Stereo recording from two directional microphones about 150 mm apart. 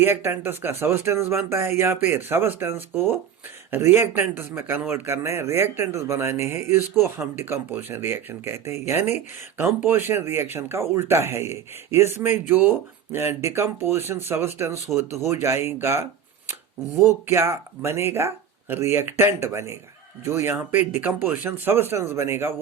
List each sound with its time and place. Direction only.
0.0 s speech: 15° right (ahead or behind)
9.6 s speech: 15° right (ahead or behind)
17.2 s speech: 20° right (ahead or behind)